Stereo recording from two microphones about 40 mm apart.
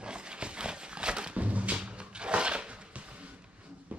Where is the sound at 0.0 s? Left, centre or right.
Right.